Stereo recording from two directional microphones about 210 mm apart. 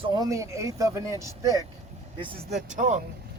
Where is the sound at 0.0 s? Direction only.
15° right (ahead or behind).